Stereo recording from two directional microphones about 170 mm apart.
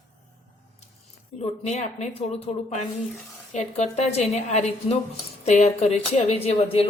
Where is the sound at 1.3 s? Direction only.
40° left (ahead or behind).